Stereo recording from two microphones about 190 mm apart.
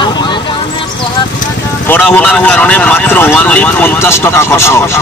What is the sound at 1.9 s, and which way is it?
Speech, 10° left (ahead or behind).